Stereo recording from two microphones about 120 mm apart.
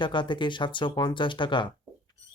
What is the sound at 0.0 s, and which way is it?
Speech, 40° left (ahead or behind).